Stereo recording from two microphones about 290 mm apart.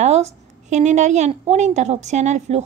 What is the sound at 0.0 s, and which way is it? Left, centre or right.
A woman's voice, right.